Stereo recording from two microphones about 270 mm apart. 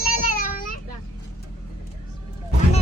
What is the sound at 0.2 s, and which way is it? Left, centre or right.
Children playing, left.